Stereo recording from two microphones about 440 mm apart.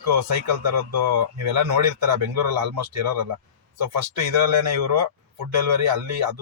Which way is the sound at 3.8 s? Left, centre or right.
Right.